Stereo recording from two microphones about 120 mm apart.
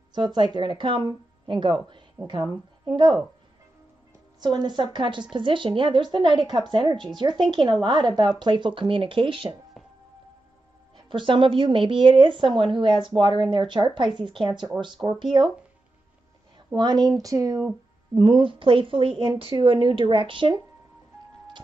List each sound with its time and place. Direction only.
0.1 s speech: 40° right (ahead or behind)
4.4 s speech: 40° right (ahead or behind)
11.1 s speech: 45° right (ahead or behind)
16.7 s speech: 35° right (ahead or behind)
18.1 s speech: 40° right (ahead or behind)